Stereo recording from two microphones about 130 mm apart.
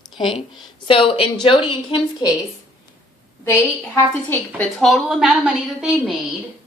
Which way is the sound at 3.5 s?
20° left (ahead or behind).